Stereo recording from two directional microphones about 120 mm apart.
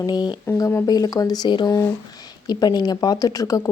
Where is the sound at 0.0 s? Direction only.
35° left (ahead or behind).